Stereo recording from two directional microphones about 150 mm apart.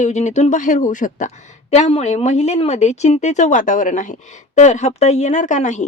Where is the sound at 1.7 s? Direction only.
45° left (ahead or behind).